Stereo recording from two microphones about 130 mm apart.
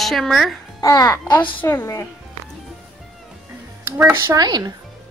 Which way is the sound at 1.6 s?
20° left (ahead or behind).